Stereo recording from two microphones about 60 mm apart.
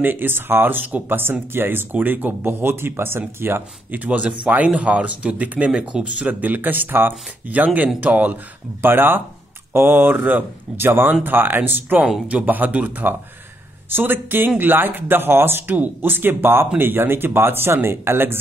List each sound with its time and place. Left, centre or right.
0.0 s speech: right